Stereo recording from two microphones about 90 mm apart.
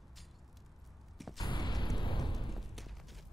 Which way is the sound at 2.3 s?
Centre (ahead or behind).